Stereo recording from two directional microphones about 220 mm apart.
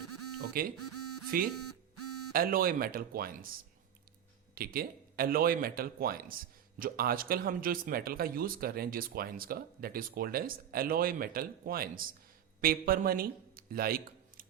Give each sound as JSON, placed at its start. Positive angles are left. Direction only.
{"t": 0.0, "sound": "a sound", "side_deg": -90}
{"t": 2.3, "sound": "speech", "side_deg": -40}
{"t": 4.5, "sound": "speech", "side_deg": -40}